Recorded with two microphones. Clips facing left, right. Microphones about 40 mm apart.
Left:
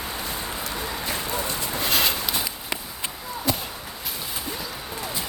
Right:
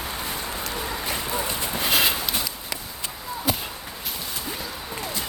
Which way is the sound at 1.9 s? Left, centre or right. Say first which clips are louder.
Right 2 dB; centre.